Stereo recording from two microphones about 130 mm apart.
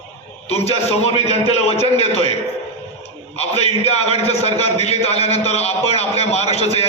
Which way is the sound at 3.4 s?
55° left (ahead or behind).